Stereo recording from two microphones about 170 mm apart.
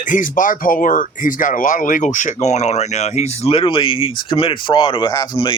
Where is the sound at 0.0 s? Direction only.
50° left (ahead or behind).